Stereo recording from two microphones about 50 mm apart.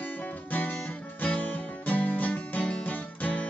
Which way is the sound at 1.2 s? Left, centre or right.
Left.